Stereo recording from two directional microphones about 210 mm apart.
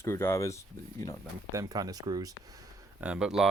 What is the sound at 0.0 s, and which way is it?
Speech, 10° left (ahead or behind).